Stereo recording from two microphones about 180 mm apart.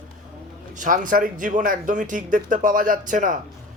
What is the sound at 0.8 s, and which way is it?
Speech, 45° right (ahead or behind).